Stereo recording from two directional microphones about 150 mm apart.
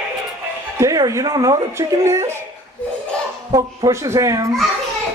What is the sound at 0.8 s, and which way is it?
Speech, 20° right (ahead or behind).